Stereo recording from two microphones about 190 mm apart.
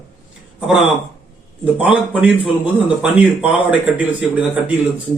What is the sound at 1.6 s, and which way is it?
Speech, 5° right (ahead or behind).